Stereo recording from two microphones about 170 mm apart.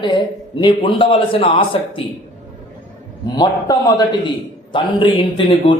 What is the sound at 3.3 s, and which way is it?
A man's voice, 20° left (ahead or behind).